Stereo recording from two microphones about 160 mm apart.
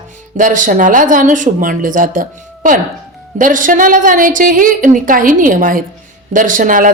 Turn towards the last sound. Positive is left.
turn(degrees=-55)  # may be behind; listen again after turning